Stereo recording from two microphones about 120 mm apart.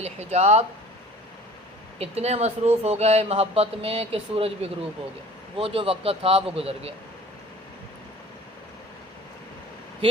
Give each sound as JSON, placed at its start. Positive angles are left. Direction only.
{"t": 0.0, "sound": "a man's voice", "side_deg": -65}
{"t": 2.0, "sound": "a man's voice", "side_deg": -60}